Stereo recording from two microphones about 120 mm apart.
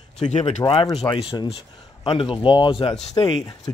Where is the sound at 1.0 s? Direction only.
45° left (ahead or behind).